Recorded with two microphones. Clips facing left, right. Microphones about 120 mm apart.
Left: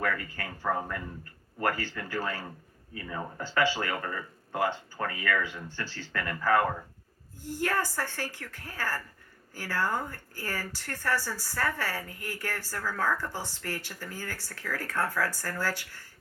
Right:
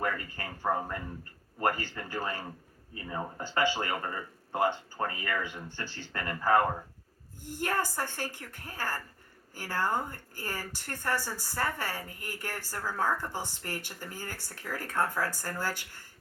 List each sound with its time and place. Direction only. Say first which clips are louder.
0.0 s speech: left 1 dB; 25° right (ahead or behind)
2.9 s speech: even; 30° right (ahead or behind)
3.6 s speech: left 1 dB; 15° right (ahead or behind)
7.6 s speech: left 1 dB; 15° right (ahead or behind)